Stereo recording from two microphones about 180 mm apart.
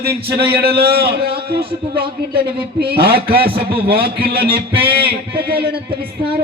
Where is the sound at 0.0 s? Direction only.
65° right (ahead or behind).